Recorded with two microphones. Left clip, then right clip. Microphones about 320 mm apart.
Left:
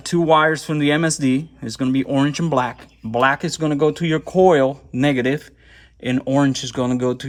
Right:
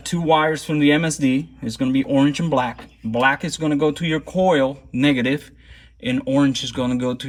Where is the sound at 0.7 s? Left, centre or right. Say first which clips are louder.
Right 1 dB; left.